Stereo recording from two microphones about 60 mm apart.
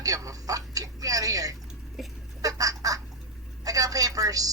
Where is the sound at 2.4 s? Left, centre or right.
Right.